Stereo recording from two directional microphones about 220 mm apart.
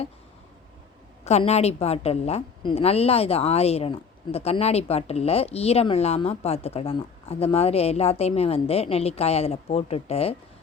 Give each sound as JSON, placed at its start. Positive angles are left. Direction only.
{"t": 1.2, "sound": "a woman's voice", "side_deg": 30}